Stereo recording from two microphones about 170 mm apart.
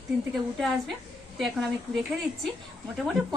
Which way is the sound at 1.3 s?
Centre (ahead or behind).